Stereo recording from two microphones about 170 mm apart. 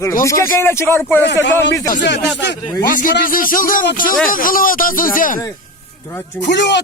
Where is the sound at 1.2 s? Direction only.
90° left.